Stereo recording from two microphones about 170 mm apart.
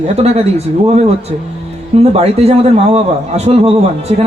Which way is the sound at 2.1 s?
35° right (ahead or behind).